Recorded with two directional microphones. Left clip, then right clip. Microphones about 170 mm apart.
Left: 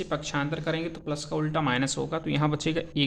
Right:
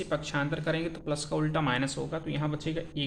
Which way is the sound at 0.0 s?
20° left (ahead or behind).